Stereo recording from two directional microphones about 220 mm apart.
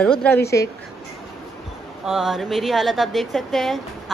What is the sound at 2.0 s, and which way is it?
Speech, centre (ahead or behind).